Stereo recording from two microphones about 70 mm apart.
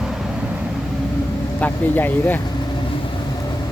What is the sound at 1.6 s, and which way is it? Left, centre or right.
Speech, left.